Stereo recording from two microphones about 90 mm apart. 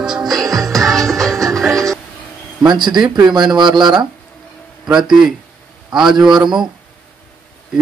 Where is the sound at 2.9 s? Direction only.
50° right (ahead or behind).